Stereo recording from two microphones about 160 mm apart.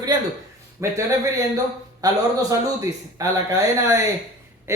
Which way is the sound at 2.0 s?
20° right (ahead or behind).